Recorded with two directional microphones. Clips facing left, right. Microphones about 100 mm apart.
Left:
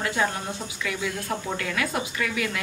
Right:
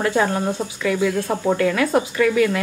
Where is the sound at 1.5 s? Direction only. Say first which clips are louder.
Right 12 dB; 40° right (ahead or behind).